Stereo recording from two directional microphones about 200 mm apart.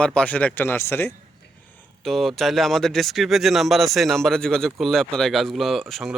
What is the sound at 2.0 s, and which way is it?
Speech, centre (ahead or behind).